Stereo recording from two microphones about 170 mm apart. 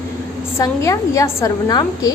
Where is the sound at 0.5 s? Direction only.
20° left (ahead or behind).